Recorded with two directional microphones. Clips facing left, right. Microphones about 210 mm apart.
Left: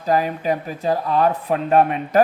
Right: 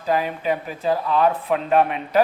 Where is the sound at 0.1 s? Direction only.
40° left (ahead or behind).